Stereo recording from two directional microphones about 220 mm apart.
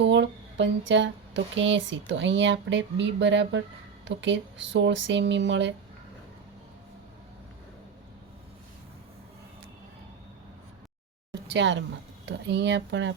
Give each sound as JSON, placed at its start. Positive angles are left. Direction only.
{"t": 0.0, "sound": "speech", "side_deg": -55}
{"t": 11.4, "sound": "speech", "side_deg": -55}